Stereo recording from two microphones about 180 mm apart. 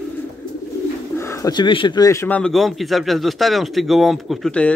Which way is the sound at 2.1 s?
10° left (ahead or behind).